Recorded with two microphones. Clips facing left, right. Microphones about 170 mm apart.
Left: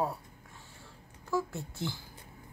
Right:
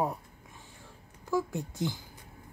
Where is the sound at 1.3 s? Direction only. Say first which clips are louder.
Right 3 dB; 15° right (ahead or behind).